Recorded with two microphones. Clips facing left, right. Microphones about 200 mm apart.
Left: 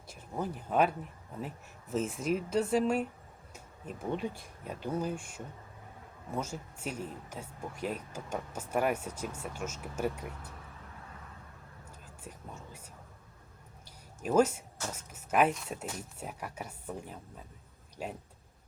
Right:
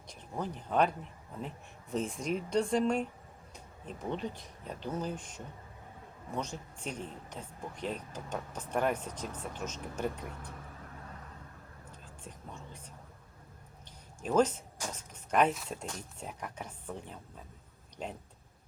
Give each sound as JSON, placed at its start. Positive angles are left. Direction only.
{"t": 0.1, "sound": "speech", "side_deg": 5}
{"t": 11.9, "sound": "whispering", "side_deg": 10}
{"t": 14.2, "sound": "speech", "side_deg": 5}